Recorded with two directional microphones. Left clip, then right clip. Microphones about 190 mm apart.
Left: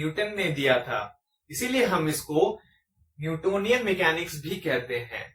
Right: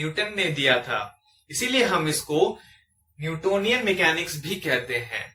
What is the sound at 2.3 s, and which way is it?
Speech, 10° right (ahead or behind).